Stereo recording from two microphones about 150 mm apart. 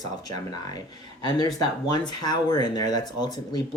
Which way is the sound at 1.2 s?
25° left (ahead or behind).